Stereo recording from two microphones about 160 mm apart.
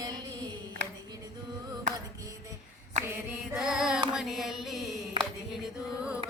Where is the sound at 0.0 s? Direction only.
25° right (ahead or behind).